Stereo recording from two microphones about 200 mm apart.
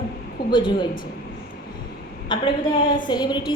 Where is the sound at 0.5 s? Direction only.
25° left (ahead or behind).